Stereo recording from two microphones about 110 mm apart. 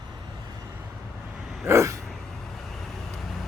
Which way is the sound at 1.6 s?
25° right (ahead or behind).